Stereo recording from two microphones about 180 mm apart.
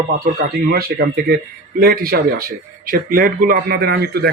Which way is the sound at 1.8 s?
60° right (ahead or behind).